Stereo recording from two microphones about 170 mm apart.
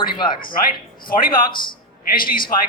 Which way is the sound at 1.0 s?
60° left (ahead or behind).